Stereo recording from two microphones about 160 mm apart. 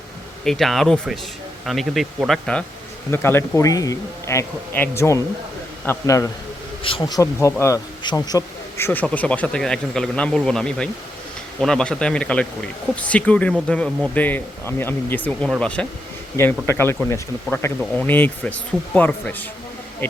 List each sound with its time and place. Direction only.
0.4 s speech: centre (ahead or behind)
3.1 s speech: 15° left (ahead or behind)